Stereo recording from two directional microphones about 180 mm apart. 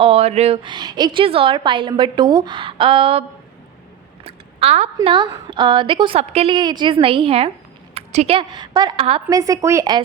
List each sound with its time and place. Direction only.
0.0 s a woman's voice: 35° right (ahead or behind)
4.2 s a sound: 35° right (ahead or behind)
5.0 s a woman's voice: 25° right (ahead or behind)
9.3 s a woman's voice: 20° right (ahead or behind)